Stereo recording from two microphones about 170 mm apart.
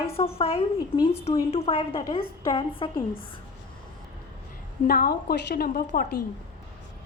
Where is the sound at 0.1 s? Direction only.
35° left (ahead or behind).